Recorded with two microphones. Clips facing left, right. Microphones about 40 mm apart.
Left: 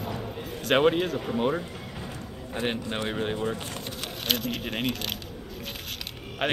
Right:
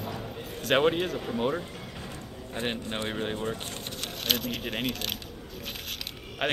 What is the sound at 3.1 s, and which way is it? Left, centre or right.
A man's voice, centre.